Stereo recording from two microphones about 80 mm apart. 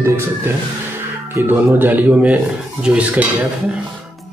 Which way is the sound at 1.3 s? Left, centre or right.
Right.